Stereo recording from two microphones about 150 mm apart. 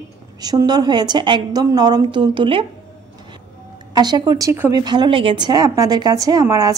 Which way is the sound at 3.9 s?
25° right (ahead or behind).